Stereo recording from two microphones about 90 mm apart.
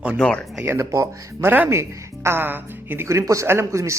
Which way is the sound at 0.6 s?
30° right (ahead or behind).